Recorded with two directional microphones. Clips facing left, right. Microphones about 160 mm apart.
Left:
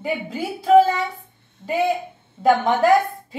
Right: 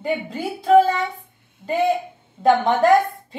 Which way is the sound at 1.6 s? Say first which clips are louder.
Right 1 dB; 10° right (ahead or behind).